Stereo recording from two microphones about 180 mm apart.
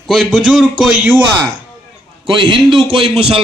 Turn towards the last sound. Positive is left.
turn(degrees=-35)  # may be behind; listen again after turning